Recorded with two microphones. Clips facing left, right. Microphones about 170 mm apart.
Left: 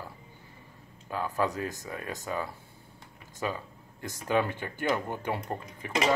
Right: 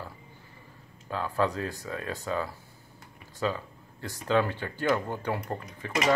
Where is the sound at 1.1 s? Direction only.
15° left (ahead or behind).